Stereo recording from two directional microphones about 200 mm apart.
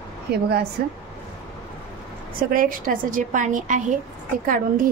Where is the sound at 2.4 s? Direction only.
45° right (ahead or behind).